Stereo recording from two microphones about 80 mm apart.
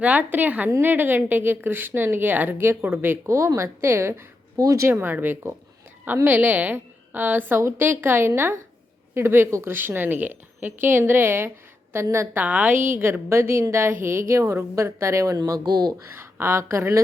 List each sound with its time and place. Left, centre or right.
0.0 s a woman's voice: centre
4.6 s speech: right
4.9 s a woman's voice: right
12.4 s a woman's voice: right
15.4 s speech: right
16.1 s a woman's voice: right